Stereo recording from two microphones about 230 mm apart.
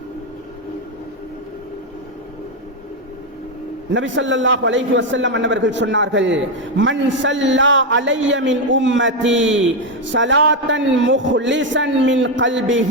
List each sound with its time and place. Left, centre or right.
3.9 s a man's voice: right